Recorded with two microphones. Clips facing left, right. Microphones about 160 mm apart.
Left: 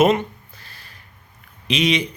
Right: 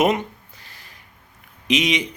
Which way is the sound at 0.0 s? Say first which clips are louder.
Left 3 dB; 15° right (ahead or behind).